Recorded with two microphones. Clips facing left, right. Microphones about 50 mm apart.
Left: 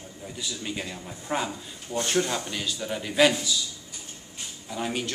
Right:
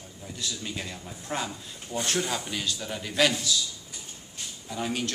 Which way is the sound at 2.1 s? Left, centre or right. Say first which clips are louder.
Left 3 dB; centre.